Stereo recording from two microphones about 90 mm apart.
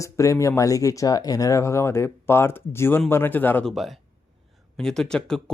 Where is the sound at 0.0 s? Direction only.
35° left (ahead or behind).